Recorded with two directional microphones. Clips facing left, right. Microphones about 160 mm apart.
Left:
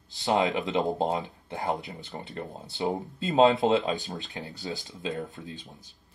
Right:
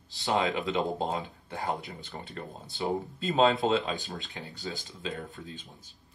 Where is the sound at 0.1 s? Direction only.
20° left (ahead or behind).